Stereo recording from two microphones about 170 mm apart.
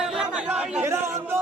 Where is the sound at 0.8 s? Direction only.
15° right (ahead or behind).